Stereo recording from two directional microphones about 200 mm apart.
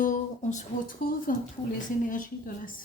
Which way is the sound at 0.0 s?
40° left (ahead or behind).